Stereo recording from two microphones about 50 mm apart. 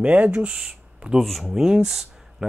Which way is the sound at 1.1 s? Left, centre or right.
Centre.